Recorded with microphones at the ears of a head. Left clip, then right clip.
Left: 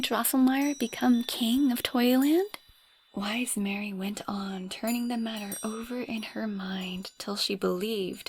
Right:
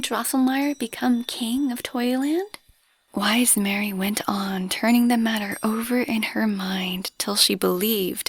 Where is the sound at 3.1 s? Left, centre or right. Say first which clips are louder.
Right 10 dB; right.